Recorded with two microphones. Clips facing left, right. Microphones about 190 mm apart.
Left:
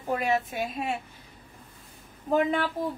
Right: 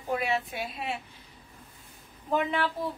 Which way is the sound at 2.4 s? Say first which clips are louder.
Left 4 dB; 45° left (ahead or behind).